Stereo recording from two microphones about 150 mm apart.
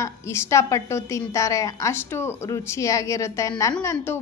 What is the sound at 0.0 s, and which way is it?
A woman's voice, 20° left (ahead or behind).